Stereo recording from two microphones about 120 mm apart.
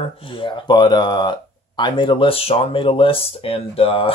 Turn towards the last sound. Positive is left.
turn(degrees=50)  # may be behind; listen again after turning